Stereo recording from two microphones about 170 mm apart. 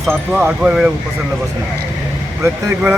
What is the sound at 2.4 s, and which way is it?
Speech, 5° right (ahead or behind).